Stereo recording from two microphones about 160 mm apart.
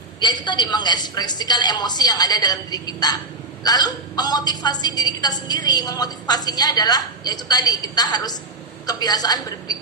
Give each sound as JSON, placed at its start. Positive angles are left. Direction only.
{"t": 0.4, "sound": "a woman's voice", "side_deg": 25}